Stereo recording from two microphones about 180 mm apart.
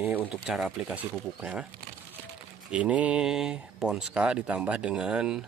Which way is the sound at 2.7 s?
5° right (ahead or behind).